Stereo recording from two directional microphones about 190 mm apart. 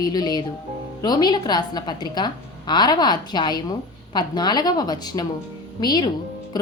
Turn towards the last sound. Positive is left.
turn(degrees=20)  # may be behind; listen again after turning